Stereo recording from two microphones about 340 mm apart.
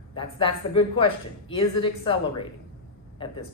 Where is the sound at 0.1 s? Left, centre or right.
Centre.